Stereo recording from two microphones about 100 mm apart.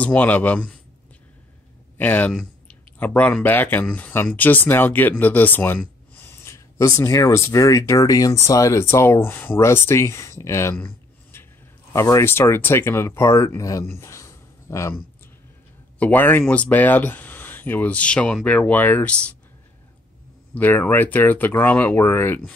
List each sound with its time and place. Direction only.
0.0 s speech: 15° left (ahead or behind)
2.0 s speech: 15° left (ahead or behind)
11.3 s a sound: 20° left (ahead or behind)
11.9 s speech: 30° left (ahead or behind)
13.8 s a sound: 30° left (ahead or behind)
16.0 s speech: 15° left (ahead or behind)
20.5 s speech: 15° left (ahead or behind)